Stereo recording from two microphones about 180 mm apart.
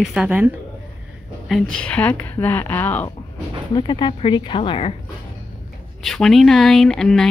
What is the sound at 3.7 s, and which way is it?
Speech, 25° left (ahead or behind).